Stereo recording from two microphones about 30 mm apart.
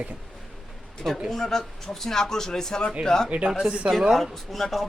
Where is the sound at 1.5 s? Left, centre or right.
Centre.